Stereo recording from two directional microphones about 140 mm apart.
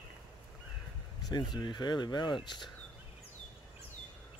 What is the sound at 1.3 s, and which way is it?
Speech, 30° left (ahead or behind).